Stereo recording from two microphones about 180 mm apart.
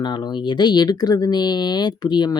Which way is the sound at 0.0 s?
25° left (ahead or behind).